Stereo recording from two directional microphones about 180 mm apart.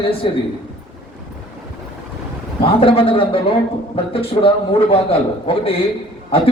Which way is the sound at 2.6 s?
30° left (ahead or behind).